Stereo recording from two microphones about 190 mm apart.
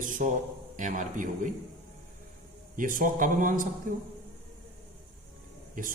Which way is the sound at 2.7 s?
45° right (ahead or behind).